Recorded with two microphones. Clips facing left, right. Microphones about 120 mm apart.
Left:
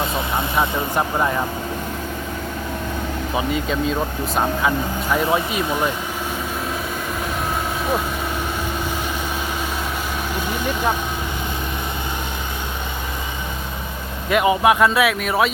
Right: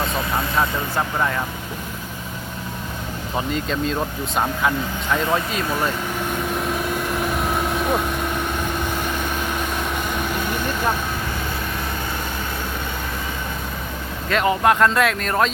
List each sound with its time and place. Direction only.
0.5 s speech: 20° left (ahead or behind)
3.3 s speech: 5° left (ahead or behind)
5.1 s speech: 10° left (ahead or behind)
6.7 s vehicle: centre (ahead or behind)
14.3 s speech: 10° left (ahead or behind)